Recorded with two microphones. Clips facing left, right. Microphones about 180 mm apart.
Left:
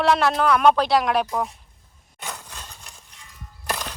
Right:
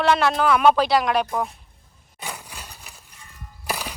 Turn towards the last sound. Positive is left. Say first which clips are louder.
# even
turn(degrees=-5)  # may be behind; listen again after turning